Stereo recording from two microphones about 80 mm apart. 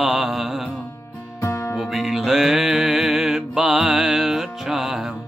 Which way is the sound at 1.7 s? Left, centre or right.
Centre.